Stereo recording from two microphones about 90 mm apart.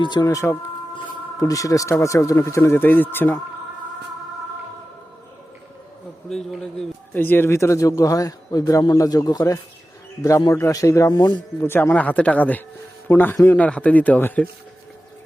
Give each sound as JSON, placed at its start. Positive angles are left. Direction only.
{"t": 0.0, "sound": "speech", "side_deg": 50}
{"t": 6.2, "sound": "speech", "side_deg": 5}
{"t": 7.1, "sound": "speech", "side_deg": 20}